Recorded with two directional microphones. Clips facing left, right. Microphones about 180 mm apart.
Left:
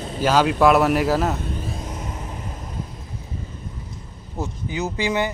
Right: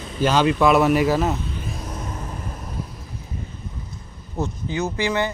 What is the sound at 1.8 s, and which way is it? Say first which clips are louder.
Vehicle: even; 20° left (ahead or behind).